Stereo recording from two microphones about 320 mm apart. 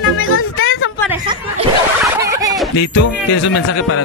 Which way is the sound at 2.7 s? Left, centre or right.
Left.